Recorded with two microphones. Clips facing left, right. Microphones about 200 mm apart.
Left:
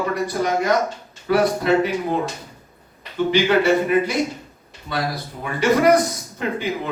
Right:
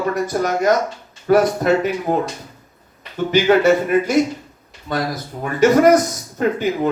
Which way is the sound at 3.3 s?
45° right (ahead or behind).